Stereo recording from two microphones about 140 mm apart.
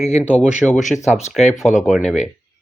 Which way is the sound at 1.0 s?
55° left (ahead or behind).